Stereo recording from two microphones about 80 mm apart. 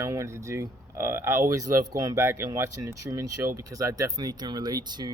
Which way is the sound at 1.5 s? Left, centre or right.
Right.